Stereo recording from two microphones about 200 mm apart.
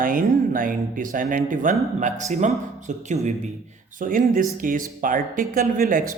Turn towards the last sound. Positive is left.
turn(degrees=-45)  # may be behind; listen again after turning